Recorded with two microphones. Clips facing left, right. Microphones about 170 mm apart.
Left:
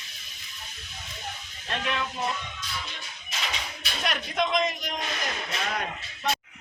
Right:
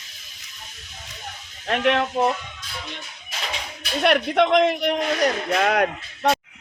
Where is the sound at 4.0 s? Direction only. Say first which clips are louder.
Right 10 dB; 65° right (ahead or behind).